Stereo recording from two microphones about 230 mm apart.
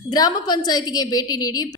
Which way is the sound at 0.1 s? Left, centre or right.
Centre.